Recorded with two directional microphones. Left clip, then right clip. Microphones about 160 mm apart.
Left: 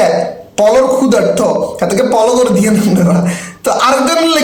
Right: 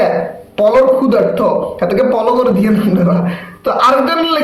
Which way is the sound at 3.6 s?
15° left (ahead or behind).